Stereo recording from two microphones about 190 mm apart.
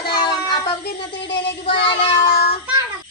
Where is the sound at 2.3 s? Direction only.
55° left (ahead or behind).